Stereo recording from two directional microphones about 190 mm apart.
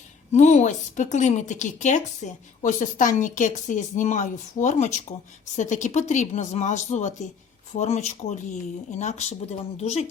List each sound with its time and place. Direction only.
0.3 s speech: 40° left (ahead or behind)